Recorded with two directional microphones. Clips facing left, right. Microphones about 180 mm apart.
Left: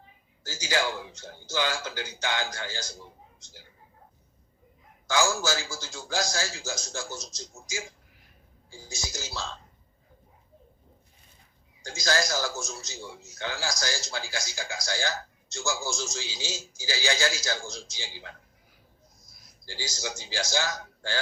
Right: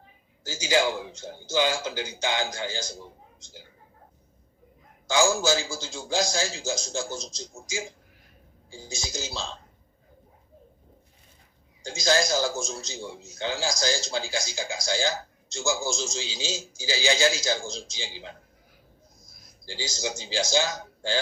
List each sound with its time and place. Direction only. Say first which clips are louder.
0.4 s a man's voice: right 5 dB; 20° right (ahead or behind)
5.0 s a man's voice: right 4 dB; 25° right (ahead or behind)
11.8 s a man's voice: right 4 dB; 25° right (ahead or behind)
19.6 s a man's voice: right 4 dB; 25° right (ahead or behind)